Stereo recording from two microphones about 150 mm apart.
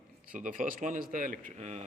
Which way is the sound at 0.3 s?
60° right (ahead or behind).